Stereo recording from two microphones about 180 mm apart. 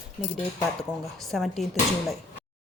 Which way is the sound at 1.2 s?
Centre (ahead or behind).